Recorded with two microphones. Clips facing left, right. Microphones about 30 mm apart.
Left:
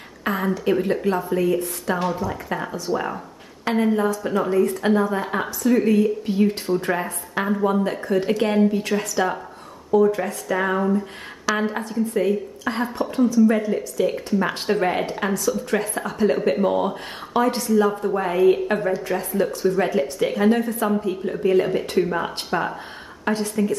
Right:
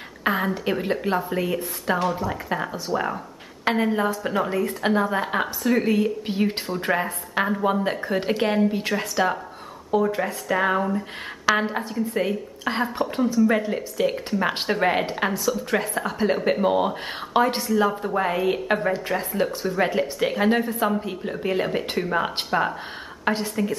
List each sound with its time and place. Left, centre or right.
0.2 s a sound: centre
0.7 s a woman's voice: centre
3.7 s a woman's voice: centre
6.7 s a woman's voice: centre
7.8 s a woman's voice: right; by 11.1 s centre
11.4 s a woman's voice: centre
21.6 s a woman's voice: centre
23.2 s speech: centre